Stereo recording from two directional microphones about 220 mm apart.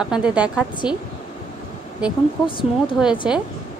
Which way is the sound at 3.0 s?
5° right (ahead or behind).